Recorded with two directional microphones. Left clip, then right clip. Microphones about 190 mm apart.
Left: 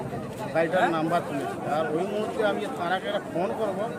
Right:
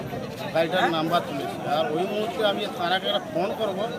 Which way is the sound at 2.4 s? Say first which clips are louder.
Right 2 dB; 10° left (ahead or behind).